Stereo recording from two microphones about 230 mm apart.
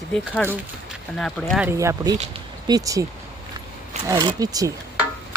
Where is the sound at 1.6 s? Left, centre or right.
Centre.